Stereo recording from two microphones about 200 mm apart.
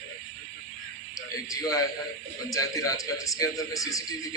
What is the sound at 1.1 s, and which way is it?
A man's voice, 15° left (ahead or behind).